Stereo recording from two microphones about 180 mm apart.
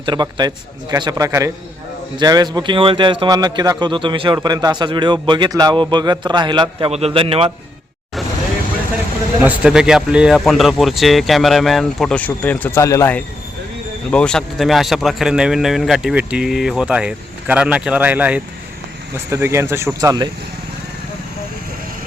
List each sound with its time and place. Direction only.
0.0 s a man's voice: 25° right (ahead or behind)
9.4 s a man's voice: 5° right (ahead or behind)